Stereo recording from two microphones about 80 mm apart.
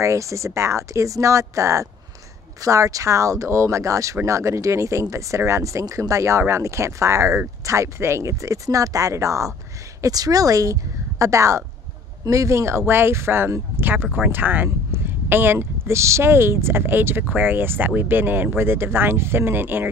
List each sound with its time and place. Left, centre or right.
0.0 s a woman's voice: right